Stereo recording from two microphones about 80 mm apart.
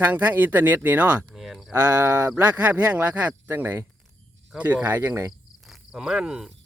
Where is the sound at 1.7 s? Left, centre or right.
Right.